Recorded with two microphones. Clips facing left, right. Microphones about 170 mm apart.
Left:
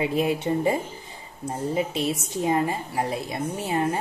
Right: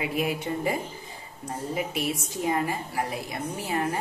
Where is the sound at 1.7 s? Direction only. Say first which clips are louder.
Left 3 dB; 25° left (ahead or behind).